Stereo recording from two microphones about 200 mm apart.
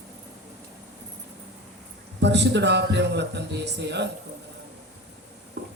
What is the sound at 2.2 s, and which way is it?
A man's voice, 60° right (ahead or behind).